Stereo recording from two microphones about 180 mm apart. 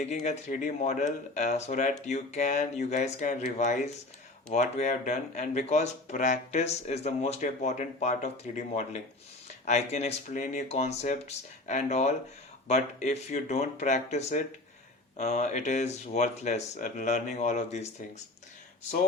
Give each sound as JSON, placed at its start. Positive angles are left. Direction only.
{"t": 0.0, "sound": "speech", "side_deg": 40}